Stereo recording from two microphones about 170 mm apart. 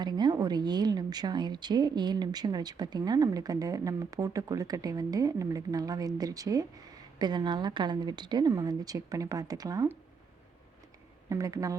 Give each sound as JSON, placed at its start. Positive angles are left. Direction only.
{"t": 0.0, "sound": "a woman's voice", "side_deg": -25}
{"t": 11.3, "sound": "a woman's voice", "side_deg": -20}